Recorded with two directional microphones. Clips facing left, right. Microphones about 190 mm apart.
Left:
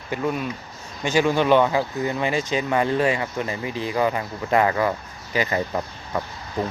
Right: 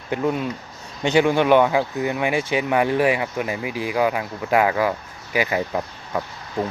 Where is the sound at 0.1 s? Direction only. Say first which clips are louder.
Right 3 dB; 20° right (ahead or behind).